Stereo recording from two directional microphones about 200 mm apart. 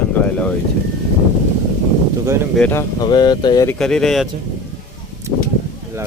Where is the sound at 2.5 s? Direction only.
10° left (ahead or behind).